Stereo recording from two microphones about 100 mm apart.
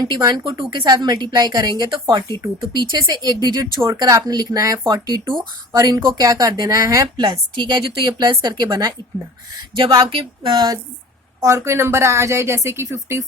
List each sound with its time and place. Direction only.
0.0 s a woman's voice: 45° right (ahead or behind)
7.2 s a woman's voice: 50° right (ahead or behind)
11.3 s a woman's voice: 30° right (ahead or behind)